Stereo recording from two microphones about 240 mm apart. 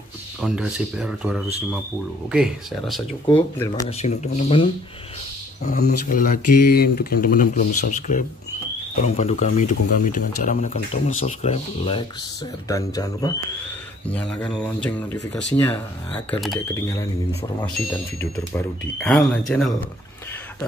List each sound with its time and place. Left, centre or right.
0.4 s speech: centre
3.3 s speech: centre
4.0 s speech: left
5.6 s speech: left; by 13.3 s centre
14.0 s speech: centre
18.2 s speech: centre